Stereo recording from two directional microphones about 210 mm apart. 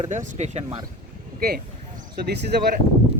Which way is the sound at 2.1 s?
50° right (ahead or behind).